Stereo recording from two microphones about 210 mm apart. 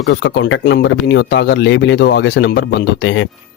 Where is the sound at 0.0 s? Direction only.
55° left (ahead or behind).